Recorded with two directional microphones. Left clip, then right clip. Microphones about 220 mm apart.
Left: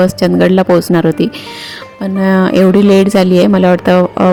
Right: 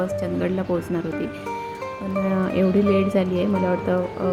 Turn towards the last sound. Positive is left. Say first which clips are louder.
# left 13 dB
turn(degrees=45)  # may be behind; listen again after turning